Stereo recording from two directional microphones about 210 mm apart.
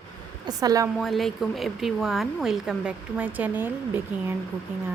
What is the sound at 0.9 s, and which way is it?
Speech, centre (ahead or behind).